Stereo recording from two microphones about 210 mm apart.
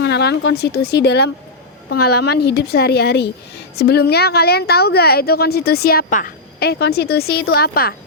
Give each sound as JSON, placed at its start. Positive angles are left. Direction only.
{"t": 0.0, "sound": "speech", "side_deg": 55}